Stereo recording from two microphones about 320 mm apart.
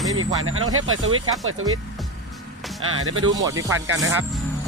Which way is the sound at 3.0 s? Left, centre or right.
Right.